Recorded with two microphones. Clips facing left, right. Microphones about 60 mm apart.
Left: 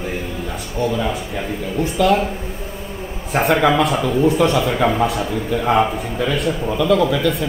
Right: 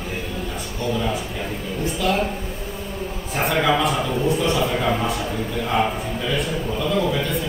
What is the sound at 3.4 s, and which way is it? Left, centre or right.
Speech, left.